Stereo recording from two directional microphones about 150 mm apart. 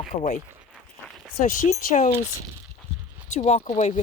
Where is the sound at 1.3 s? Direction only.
65° left (ahead or behind).